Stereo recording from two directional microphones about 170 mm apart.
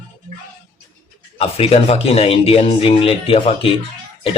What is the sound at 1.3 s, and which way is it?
Speech, 35° left (ahead or behind).